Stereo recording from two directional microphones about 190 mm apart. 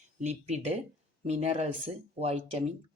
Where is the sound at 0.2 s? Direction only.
35° right (ahead or behind).